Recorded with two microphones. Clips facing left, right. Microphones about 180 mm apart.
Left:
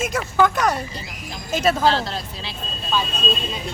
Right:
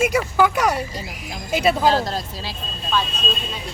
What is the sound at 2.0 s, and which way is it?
Speech, 40° right (ahead or behind).